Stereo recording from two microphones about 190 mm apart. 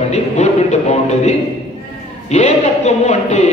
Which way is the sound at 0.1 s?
40° left (ahead or behind).